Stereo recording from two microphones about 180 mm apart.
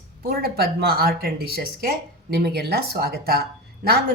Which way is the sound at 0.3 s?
60° right (ahead or behind).